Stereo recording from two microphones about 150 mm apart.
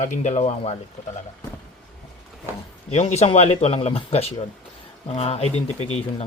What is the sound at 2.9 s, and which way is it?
Speech, 45° left (ahead or behind).